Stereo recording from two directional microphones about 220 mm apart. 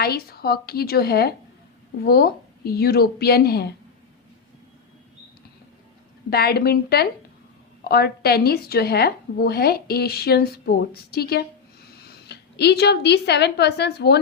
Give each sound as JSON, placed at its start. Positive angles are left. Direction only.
{"t": 0.0, "sound": "speech", "side_deg": 45}
{"t": 6.3, "sound": "a woman's voice", "side_deg": 45}